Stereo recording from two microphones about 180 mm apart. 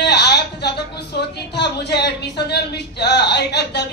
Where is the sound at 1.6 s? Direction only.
70° left (ahead or behind).